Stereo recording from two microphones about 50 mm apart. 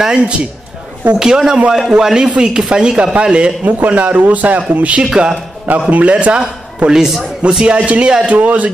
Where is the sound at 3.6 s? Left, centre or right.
Right.